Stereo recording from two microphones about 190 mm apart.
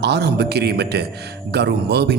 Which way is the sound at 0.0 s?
60° right (ahead or behind).